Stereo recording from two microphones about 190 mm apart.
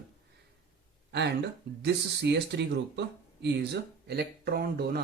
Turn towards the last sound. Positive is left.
turn(degrees=-55)  # may be behind; listen again after turning